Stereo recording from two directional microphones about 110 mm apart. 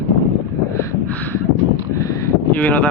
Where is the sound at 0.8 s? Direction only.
25° left (ahead or behind).